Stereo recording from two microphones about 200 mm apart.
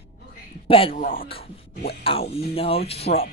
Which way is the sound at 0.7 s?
25° left (ahead or behind).